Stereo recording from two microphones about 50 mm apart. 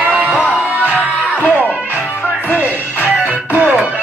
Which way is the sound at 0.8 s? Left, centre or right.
Left.